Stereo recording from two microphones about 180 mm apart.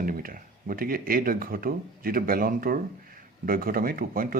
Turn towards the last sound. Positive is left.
turn(degrees=-55)  # may be behind; listen again after turning